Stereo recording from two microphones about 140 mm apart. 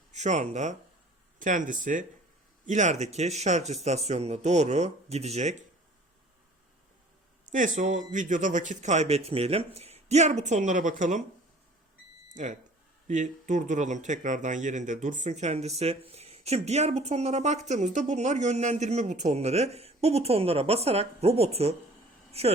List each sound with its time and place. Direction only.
0.1 s speech: 55° right (ahead or behind)
1.4 s speech: 70° right (ahead or behind)
7.8 s speech: 65° right (ahead or behind)
13.1 s speech: 60° right (ahead or behind); by 22.5 s 45° right (ahead or behind)